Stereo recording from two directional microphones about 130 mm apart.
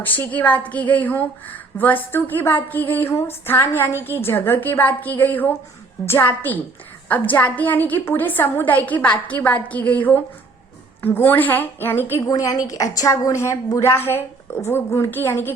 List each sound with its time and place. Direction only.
0.0 s a woman's voice: 15° left (ahead or behind)